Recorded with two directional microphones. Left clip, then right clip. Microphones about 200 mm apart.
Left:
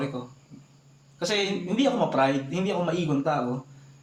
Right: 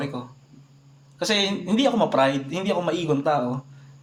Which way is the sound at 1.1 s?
45° right (ahead or behind).